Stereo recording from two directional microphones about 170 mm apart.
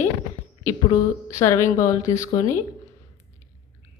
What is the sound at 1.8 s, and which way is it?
Speech, 20° left (ahead or behind).